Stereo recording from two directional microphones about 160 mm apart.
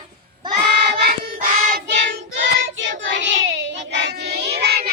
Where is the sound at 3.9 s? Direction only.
90° right.